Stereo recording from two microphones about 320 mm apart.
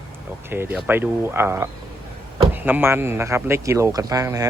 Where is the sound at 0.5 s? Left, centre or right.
Centre.